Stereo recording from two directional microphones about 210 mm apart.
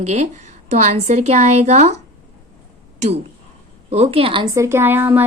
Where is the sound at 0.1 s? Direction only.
35° right (ahead or behind).